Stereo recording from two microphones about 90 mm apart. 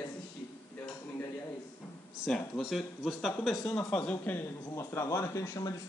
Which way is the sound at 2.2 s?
Centre (ahead or behind).